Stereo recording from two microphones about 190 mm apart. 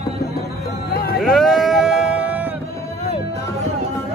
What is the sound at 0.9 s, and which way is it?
Hubbub, 50° left (ahead or behind).